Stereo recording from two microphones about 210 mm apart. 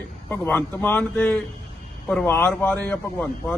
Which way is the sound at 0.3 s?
10° left (ahead or behind).